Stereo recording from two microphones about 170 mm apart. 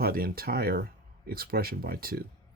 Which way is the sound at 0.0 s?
60° right (ahead or behind).